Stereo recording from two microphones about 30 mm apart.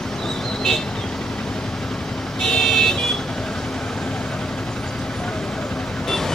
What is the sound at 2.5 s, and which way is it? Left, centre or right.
Vehicle, centre.